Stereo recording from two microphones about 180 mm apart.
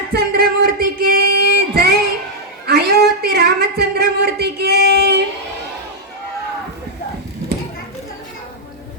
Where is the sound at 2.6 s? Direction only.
60° right (ahead or behind).